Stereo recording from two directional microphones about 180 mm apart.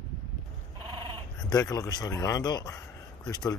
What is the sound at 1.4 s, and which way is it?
A man's voice, 20° left (ahead or behind).